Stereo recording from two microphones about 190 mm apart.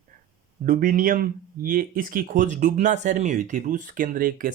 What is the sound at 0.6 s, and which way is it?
Speech, 45° right (ahead or behind).